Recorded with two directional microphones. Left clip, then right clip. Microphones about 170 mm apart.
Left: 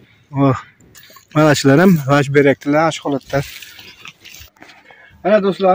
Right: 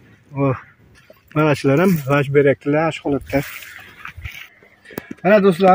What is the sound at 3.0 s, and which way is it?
Speech, 45° left (ahead or behind).